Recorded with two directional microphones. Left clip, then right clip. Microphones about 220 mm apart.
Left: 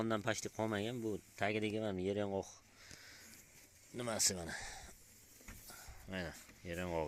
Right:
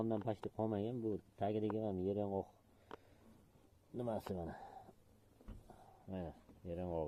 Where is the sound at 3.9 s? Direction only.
15° left (ahead or behind).